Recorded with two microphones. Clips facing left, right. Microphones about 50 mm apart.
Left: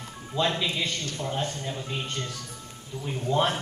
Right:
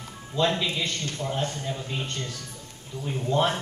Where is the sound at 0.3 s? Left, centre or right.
Centre.